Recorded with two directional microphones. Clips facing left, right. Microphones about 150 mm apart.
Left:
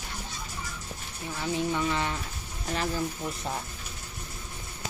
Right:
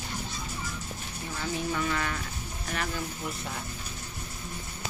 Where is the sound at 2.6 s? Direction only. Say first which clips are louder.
Left 3 dB; 30° left (ahead or behind).